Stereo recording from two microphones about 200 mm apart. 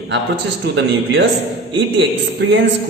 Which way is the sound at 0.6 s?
60° right (ahead or behind).